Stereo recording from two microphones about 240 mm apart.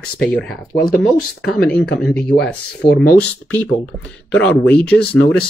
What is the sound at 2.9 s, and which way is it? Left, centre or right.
Speech, left.